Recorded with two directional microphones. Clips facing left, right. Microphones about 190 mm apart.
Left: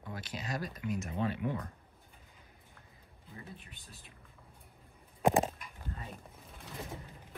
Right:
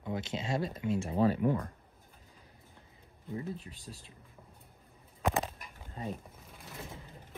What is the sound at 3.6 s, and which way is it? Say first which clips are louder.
Speech: right 7 dB; 30° right (ahead or behind).